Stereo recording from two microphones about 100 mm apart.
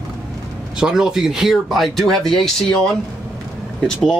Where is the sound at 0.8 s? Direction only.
5° right (ahead or behind).